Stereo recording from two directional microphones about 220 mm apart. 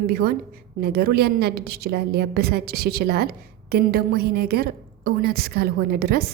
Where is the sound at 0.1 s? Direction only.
45° right (ahead or behind).